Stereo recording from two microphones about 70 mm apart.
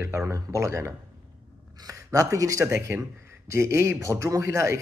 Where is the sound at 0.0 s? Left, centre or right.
Right.